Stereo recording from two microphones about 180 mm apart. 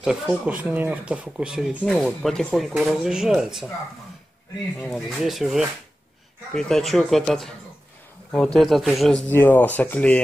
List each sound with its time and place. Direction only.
0.0 s speech: 5° right (ahead or behind)
4.8 s speech: centre (ahead or behind)
8.5 s speech: centre (ahead or behind)
9.3 s speech: 10° left (ahead or behind)